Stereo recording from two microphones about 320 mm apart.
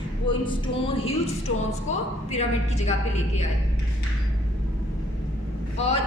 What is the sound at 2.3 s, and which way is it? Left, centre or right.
Speech, left.